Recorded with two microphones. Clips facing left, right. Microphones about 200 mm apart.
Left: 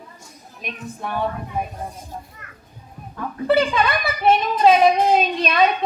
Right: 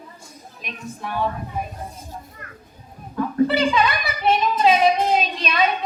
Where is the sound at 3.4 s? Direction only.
50° left (ahead or behind).